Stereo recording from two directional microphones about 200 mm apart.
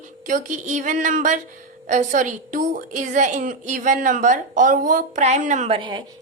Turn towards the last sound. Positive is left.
turn(degrees=-25)  # may be behind; listen again after turning